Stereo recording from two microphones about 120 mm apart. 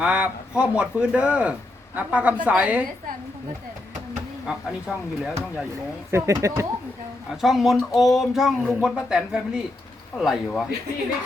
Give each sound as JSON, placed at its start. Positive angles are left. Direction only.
{"t": 0.0, "sound": "speech", "side_deg": -10}
{"t": 4.4, "sound": "speech", "side_deg": -5}
{"t": 6.1, "sound": "speech", "side_deg": -25}
{"t": 7.4, "sound": "speech", "side_deg": 0}